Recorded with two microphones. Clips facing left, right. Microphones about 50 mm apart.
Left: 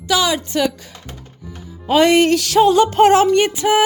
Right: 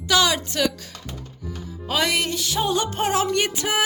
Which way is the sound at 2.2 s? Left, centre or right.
Left.